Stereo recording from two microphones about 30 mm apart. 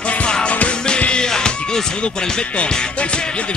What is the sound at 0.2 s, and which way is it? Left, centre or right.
Music, left.